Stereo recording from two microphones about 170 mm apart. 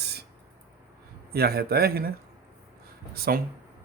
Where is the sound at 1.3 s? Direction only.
65° right (ahead or behind).